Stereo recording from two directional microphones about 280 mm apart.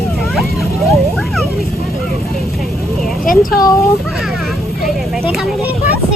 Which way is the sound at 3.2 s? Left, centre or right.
Left.